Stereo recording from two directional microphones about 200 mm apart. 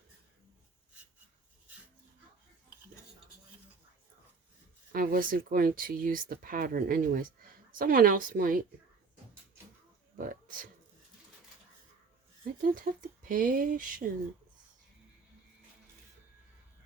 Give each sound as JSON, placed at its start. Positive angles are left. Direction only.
{"t": 4.9, "sound": "speech", "side_deg": -45}
{"t": 10.2, "sound": "a man's voice", "side_deg": -45}
{"t": 12.6, "sound": "speech", "side_deg": -45}